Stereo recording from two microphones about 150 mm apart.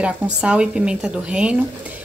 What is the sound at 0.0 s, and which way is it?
Speech, 5° right (ahead or behind).